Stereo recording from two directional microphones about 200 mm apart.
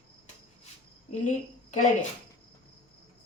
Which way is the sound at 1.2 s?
40° left (ahead or behind).